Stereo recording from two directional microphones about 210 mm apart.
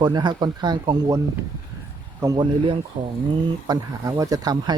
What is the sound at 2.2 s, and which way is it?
Speech, 20° right (ahead or behind).